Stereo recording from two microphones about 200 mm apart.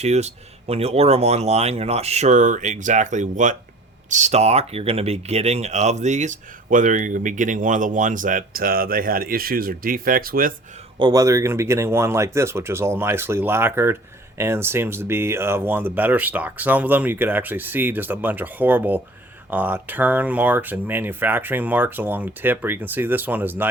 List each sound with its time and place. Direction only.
0.0 s speech: 35° right (ahead or behind)
11.0 s speech: 15° right (ahead or behind)